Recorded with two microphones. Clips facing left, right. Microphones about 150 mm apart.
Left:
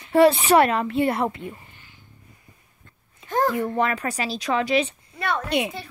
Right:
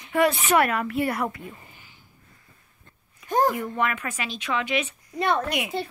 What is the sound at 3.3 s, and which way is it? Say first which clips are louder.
Speech: right 1 dB; 15° right (ahead or behind).